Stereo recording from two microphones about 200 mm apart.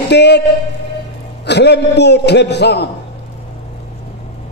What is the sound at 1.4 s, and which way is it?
A man's voice, 60° left (ahead or behind).